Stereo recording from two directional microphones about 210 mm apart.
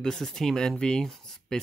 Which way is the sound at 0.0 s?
Centre (ahead or behind).